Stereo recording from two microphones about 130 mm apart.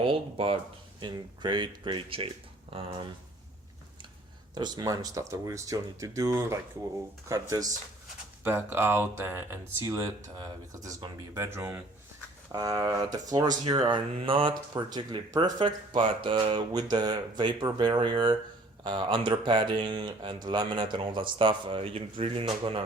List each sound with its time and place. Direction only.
0.0 s speech: 45° right (ahead or behind)
4.5 s speech: 30° right (ahead or behind)
9.8 s speech: 30° right (ahead or behind)
12.5 s speech: 30° right (ahead or behind); by 22.8 s 45° right (ahead or behind)